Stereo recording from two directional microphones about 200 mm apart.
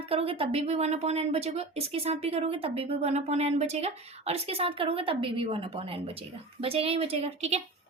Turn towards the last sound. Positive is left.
turn(degrees=-30)  # may be behind; listen again after turning